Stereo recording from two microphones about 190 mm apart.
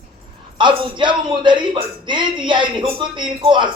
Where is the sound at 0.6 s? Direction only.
25° right (ahead or behind).